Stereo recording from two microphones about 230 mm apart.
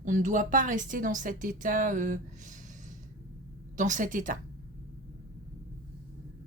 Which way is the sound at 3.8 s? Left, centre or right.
Right.